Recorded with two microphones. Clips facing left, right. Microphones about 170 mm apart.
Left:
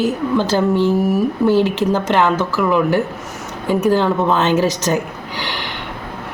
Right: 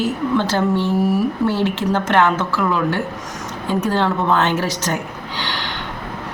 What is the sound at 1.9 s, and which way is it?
Speech, 10° left (ahead or behind).